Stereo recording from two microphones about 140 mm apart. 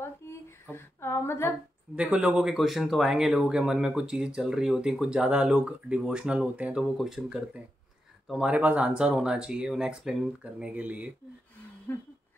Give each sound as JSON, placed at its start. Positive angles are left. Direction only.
{"t": 0.0, "sound": "female singing", "side_deg": 15}
{"t": 2.0, "sound": "speech", "side_deg": -10}
{"t": 11.9, "sound": "speech", "side_deg": 15}